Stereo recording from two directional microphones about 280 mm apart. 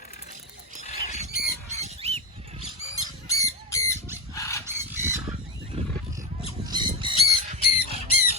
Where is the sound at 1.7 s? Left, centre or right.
Right.